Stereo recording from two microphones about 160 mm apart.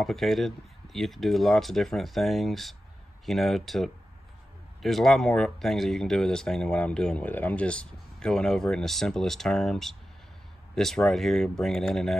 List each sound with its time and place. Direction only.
0.0 s speech: centre (ahead or behind)